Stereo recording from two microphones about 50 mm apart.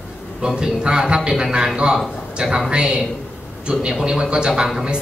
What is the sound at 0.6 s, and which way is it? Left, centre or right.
A man's voice, centre.